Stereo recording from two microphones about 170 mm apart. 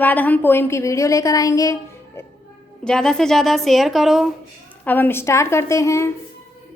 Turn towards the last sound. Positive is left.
turn(degrees=15)  # may be behind; listen again after turning